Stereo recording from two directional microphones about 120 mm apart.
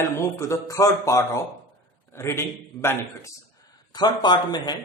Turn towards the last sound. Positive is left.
turn(degrees=35)  # may be behind; listen again after turning